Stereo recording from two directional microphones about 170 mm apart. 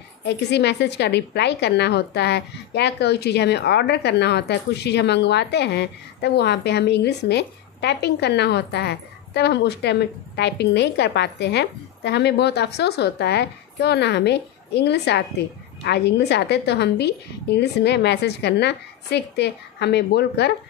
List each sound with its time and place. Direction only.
0.2 s a woman's voice: 85° left